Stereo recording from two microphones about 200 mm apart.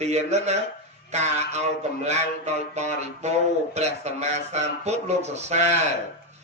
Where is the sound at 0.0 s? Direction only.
35° right (ahead or behind).